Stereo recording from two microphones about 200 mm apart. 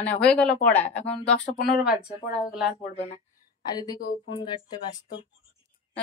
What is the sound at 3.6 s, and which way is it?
Speech, 20° left (ahead or behind).